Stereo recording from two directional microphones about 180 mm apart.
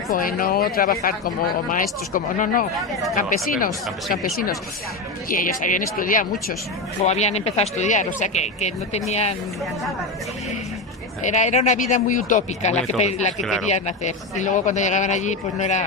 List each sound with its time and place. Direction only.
0.1 s speech: 50° left (ahead or behind)
7.0 s speech: 40° left (ahead or behind)
11.3 s speech: 40° left (ahead or behind)
13.4 s speech: centre (ahead or behind)
13.7 s speech: 40° left (ahead or behind)